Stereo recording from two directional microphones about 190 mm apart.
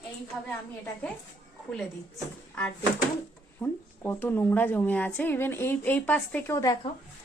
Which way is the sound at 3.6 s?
10° left (ahead or behind).